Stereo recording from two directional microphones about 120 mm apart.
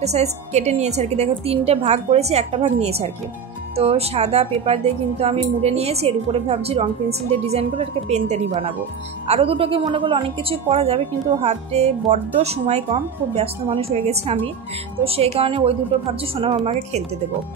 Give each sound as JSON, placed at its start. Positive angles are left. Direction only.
{"t": 0.0, "sound": "a woman's voice", "side_deg": -65}
{"t": 8.5, "sound": "a woman's voice", "side_deg": -50}
{"t": 15.3, "sound": "a woman's voice", "side_deg": -50}